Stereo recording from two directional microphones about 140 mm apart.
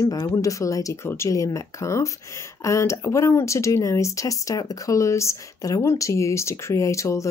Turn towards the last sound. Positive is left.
turn(degrees=20)  # may be behind; listen again after turning